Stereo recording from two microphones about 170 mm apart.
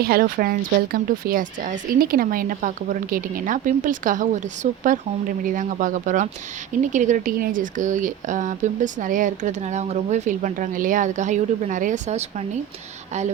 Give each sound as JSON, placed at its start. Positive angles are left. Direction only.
{"t": 0.0, "sound": "speech", "side_deg": -60}